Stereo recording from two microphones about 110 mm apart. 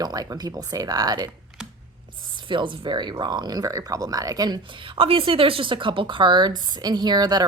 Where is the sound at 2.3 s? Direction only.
45° right (ahead or behind).